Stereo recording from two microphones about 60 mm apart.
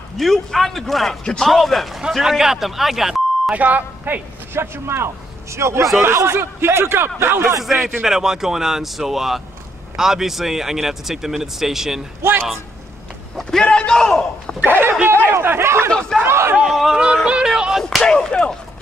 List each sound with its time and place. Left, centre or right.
0.2 s speech: centre
3.5 s speech: right
4.6 s a man's voice: right
7.6 s speech: centre
12.2 s speech: right
13.4 s speech: centre
14.7 s a man's voice: right
16.6 s speech: centre
16.9 s speech: centre
17.8 s speech: centre